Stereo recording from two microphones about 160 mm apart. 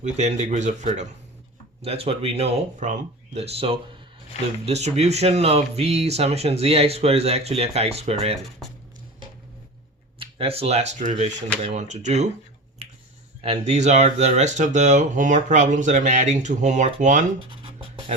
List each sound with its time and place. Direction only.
0.0 s speech: 45° right (ahead or behind)
10.2 s speech: 35° right (ahead or behind)
13.4 s speech: 40° right (ahead or behind)